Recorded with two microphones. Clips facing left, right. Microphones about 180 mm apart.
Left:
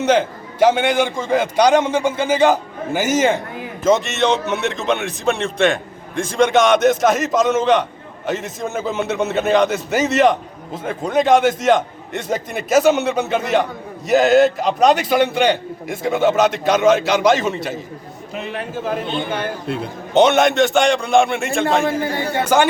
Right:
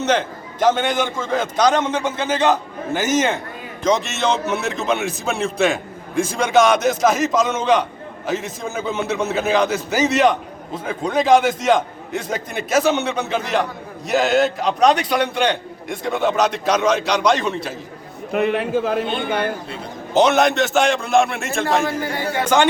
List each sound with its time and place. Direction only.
0.0 s a man's voice: 10° left (ahead or behind)
18.3 s a man's voice: 60° right (ahead or behind)
19.6 s a man's voice: 60° left (ahead or behind)
20.1 s a man's voice: centre (ahead or behind)
21.8 s a man's voice: 25° left (ahead or behind)
22.4 s a man's voice: 5° left (ahead or behind)